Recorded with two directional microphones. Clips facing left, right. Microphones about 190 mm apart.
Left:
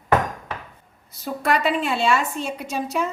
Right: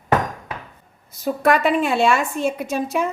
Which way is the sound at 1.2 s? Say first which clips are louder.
Right 4 dB; 50° right (ahead or behind).